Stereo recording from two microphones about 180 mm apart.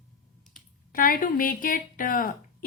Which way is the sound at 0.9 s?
50° left (ahead or behind).